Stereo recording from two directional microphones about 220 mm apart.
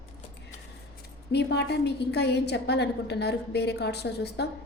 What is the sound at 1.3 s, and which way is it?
A woman's voice, 50° left (ahead or behind).